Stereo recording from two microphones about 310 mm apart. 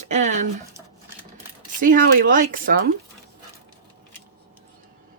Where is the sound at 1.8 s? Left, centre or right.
Right.